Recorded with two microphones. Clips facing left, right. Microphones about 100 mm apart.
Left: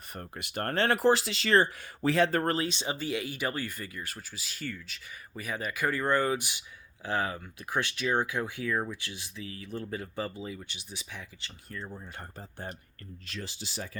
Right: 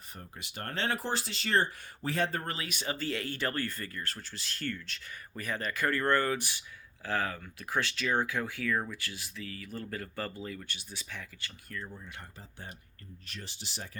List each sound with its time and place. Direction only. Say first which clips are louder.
0.1 s speech: left 7 dB; 60° left (ahead or behind); by 2.4 s 90° left
2.4 s speech: left 9 dB; 45° left (ahead or behind)
2.6 s speech: left 2 dB; 20° left (ahead or behind)
12.4 s speech: left 6 dB; 50° left (ahead or behind)
13.3 s speech: left 6 dB; 90° left